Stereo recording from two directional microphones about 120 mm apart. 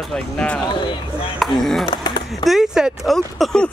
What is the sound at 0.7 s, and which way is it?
Speech, 40° left (ahead or behind).